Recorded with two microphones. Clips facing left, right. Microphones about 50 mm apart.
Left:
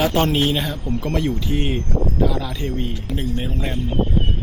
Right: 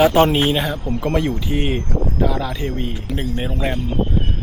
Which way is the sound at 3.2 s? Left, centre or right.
Right.